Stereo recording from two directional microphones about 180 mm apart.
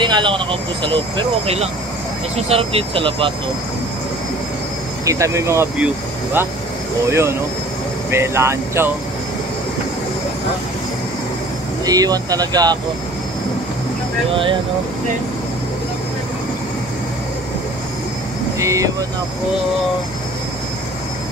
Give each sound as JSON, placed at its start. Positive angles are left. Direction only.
{"t": 0.0, "sound": "speech", "side_deg": -25}
{"t": 5.0, "sound": "speech", "side_deg": -15}
{"t": 7.1, "sound": "speech", "side_deg": -15}
{"t": 11.8, "sound": "speech", "side_deg": -20}
{"t": 14.3, "sound": "speech", "side_deg": -30}
{"t": 18.6, "sound": "speech", "side_deg": -15}